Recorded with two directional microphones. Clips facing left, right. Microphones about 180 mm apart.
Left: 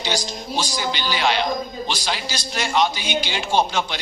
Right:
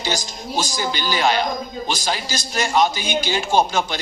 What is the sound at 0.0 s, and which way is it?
A man's voice, 45° right (ahead or behind).